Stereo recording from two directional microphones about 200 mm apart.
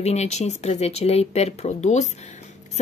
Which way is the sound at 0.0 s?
35° left (ahead or behind).